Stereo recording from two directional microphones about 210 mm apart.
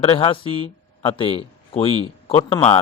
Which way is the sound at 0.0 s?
25° left (ahead or behind).